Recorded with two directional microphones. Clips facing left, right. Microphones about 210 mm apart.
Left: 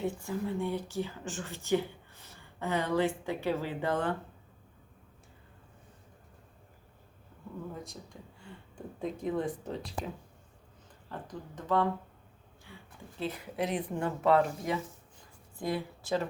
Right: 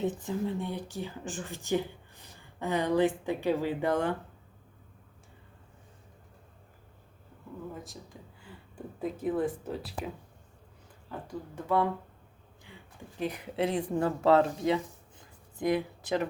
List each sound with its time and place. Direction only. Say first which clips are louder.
0.0 s speech: right 3 dB; 20° right (ahead or behind)
7.7 s speech: even; centre (ahead or behind)
11.1 s speech: right 3 dB; 10° right (ahead or behind)
12.7 s a sound: even; 20° right (ahead or behind)
13.1 s speech: right 2 dB; 15° right (ahead or behind)
13.6 s speech: right 4 dB; 30° right (ahead or behind)